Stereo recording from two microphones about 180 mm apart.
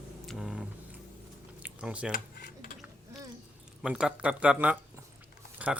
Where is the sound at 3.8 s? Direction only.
5° right (ahead or behind).